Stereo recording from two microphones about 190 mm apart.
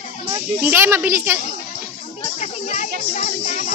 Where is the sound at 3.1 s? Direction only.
40° left (ahead or behind).